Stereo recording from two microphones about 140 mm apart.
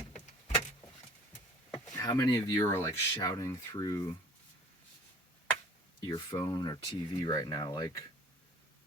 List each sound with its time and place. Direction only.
2.0 s speech: 25° left (ahead or behind)
6.0 s speech: 30° left (ahead or behind)